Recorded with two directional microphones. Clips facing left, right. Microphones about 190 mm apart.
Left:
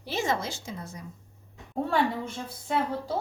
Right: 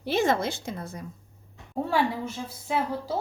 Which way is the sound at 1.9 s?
5° right (ahead or behind).